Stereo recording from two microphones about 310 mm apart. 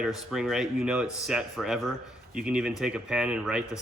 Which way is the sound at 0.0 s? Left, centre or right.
Centre.